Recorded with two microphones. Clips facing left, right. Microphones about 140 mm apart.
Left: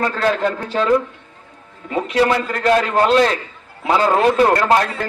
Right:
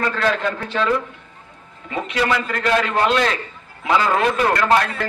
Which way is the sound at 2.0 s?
40° left (ahead or behind).